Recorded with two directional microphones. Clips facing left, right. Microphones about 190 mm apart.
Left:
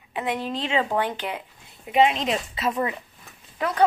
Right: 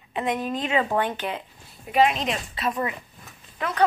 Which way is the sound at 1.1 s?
15° left (ahead or behind).